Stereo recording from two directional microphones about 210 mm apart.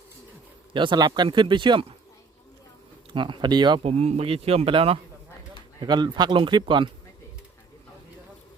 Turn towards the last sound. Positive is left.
turn(degrees=-20)  # may be behind; listen again after turning